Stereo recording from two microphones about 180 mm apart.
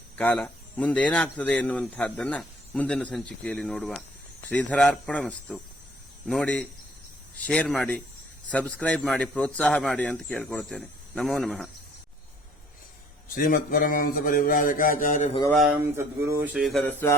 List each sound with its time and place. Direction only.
0.2 s a man's voice: 10° left (ahead or behind)
13.3 s speech: 55° left (ahead or behind)
15.4 s a man's voice: centre (ahead or behind)
15.8 s speech: 15° right (ahead or behind)
16.8 s speech: 10° left (ahead or behind)